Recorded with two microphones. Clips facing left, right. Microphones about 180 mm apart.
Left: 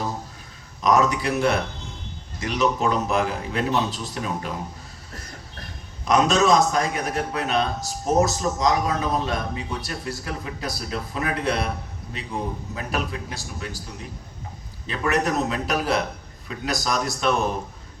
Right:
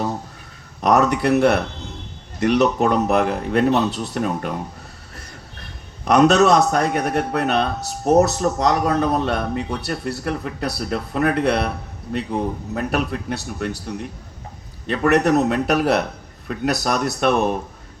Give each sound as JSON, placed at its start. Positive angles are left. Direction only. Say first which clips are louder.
{"t": 0.8, "sound": "a man's voice", "louder": "right 3 dB", "side_deg": -65}
{"t": 6.1, "sound": "a man's voice", "louder": "right 5 dB", "side_deg": -65}
{"t": 12.7, "sound": "a man's voice", "louder": "right 7 dB", "side_deg": -60}